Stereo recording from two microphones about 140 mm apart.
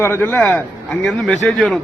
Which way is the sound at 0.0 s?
15° left (ahead or behind).